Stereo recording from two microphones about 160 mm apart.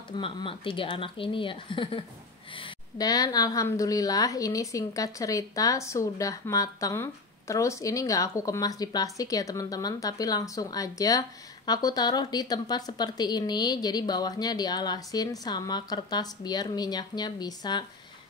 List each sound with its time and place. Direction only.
0.1 s a woman's voice: 30° left (ahead or behind)